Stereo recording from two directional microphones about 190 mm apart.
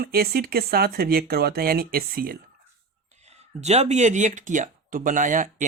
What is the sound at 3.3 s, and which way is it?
Speech, 35° right (ahead or behind).